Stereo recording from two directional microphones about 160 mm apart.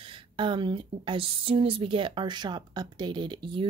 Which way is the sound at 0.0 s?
30° right (ahead or behind).